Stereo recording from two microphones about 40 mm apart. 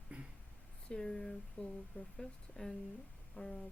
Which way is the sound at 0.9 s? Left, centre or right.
Centre.